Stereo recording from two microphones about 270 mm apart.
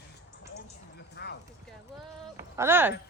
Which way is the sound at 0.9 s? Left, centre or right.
Left.